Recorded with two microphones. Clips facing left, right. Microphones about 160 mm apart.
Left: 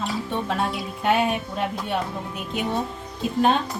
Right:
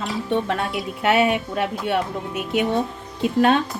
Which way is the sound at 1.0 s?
70° right (ahead or behind).